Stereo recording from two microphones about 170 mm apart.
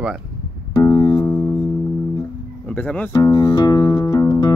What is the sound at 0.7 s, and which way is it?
Music, 25° left (ahead or behind).